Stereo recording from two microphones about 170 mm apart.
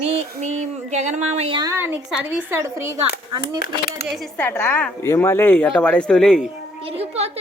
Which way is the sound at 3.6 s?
65° left (ahead or behind).